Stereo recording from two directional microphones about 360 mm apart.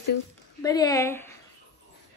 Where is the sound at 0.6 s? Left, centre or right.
Centre.